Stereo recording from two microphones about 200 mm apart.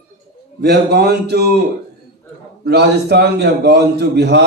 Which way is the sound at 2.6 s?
55° right (ahead or behind).